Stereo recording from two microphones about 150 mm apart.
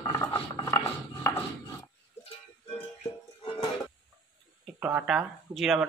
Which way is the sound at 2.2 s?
35° left (ahead or behind).